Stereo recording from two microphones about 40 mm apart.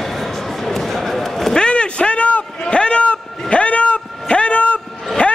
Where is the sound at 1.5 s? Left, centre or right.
Left.